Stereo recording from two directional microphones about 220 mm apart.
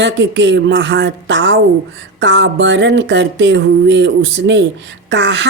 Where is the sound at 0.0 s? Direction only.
55° right (ahead or behind).